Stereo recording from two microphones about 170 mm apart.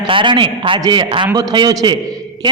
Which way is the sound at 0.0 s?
30° right (ahead or behind).